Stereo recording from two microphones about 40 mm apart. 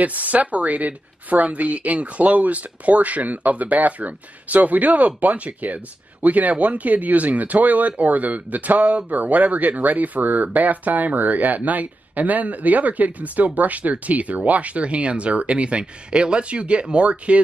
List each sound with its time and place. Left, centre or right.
0.0 s speech: right